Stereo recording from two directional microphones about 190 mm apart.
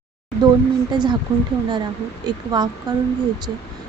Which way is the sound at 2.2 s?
20° right (ahead or behind).